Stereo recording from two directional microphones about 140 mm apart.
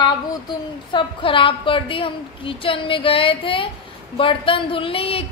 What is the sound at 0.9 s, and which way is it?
Speech, 35° left (ahead or behind).